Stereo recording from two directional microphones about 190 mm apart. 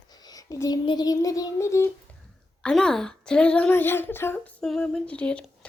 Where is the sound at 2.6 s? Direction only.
5° left (ahead or behind).